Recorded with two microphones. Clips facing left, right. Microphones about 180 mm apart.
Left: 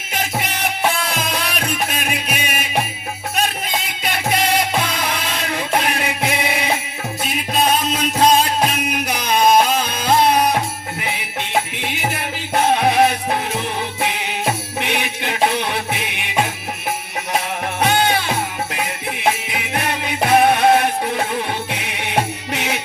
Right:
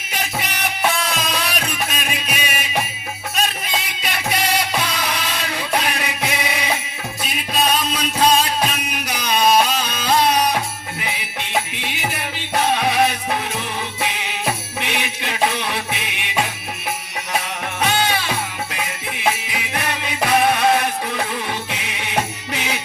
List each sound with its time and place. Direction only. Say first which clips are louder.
1.1 s music: even; 55° left (ahead or behind)
4.0 s music: left 4 dB; 50° left (ahead or behind)
7.9 s music: left 2 dB; 50° left (ahead or behind)
12.7 s music: left 4 dB; 55° left (ahead or behind)
14.8 s jingle bell: left 3 dB; 55° left (ahead or behind)
17.7 s music: left 3 dB; 55° left (ahead or behind)
19.5 s music: left 2 dB; 55° left (ahead or behind)